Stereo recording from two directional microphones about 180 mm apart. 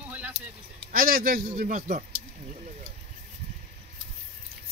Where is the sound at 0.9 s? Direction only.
55° right (ahead or behind).